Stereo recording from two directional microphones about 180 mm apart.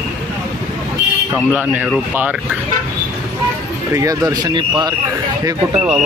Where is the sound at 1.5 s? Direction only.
10° right (ahead or behind).